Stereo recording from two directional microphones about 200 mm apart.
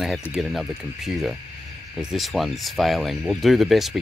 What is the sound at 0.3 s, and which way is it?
Speech, centre (ahead or behind).